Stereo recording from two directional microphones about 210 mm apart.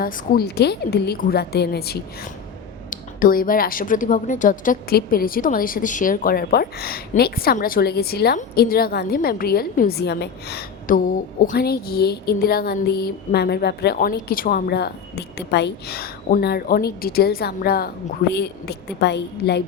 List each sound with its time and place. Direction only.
0.0 s speech: 50° left (ahead or behind)